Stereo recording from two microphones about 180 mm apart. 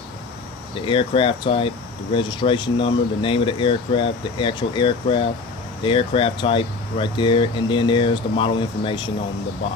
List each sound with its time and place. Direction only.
0.9 s speech: 30° left (ahead or behind)